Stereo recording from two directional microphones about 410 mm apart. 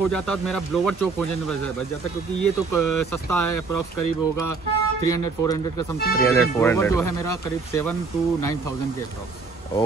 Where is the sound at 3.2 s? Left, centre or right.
Left.